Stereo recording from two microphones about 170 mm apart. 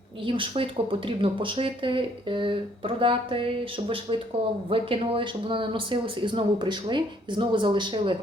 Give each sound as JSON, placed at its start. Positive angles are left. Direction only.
{"t": 0.3, "sound": "speech", "side_deg": -30}